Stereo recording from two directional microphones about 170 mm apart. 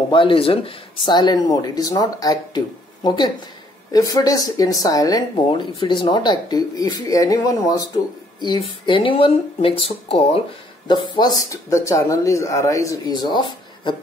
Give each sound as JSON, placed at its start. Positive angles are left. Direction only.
{"t": 0.1, "sound": "speech", "side_deg": 30}